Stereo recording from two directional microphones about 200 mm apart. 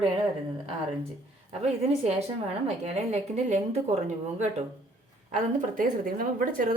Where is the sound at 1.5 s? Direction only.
35° right (ahead or behind).